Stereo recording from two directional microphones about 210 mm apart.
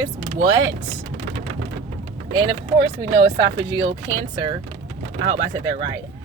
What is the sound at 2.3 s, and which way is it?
Speech, 20° right (ahead or behind).